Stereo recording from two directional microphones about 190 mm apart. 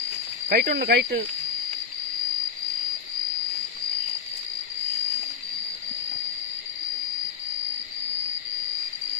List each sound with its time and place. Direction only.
0.5 s speech: 50° right (ahead or behind)